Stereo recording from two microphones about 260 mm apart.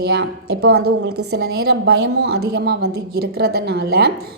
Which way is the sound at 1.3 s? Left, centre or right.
Right.